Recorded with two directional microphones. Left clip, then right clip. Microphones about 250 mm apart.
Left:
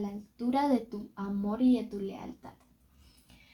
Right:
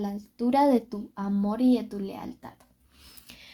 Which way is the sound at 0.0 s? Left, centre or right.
Right.